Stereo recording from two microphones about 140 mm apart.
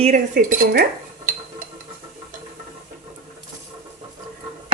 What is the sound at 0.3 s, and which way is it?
Speech, 90° right.